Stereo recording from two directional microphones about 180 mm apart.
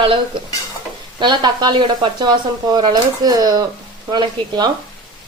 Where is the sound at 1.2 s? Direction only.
25° right (ahead or behind).